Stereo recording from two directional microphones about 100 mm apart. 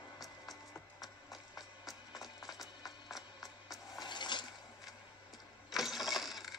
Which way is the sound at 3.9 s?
50° left (ahead or behind).